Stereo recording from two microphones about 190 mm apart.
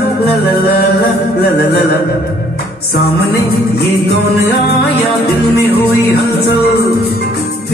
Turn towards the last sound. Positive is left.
turn(degrees=55)  # may be behind; listen again after turning